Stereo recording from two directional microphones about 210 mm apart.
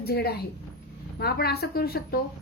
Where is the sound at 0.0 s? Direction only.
45° left (ahead or behind).